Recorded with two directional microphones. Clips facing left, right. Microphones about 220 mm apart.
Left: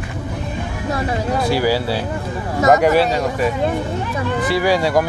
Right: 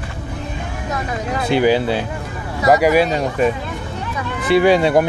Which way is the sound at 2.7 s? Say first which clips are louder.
Even; 10° right (ahead or behind).